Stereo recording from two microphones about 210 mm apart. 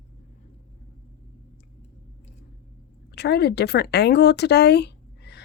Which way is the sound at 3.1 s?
50° left (ahead or behind).